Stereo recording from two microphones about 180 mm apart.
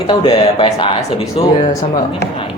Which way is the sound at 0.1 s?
30° left (ahead or behind).